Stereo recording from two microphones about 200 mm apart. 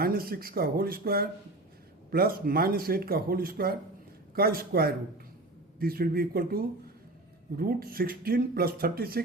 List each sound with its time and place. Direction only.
0.0 s speech: 50° right (ahead or behind)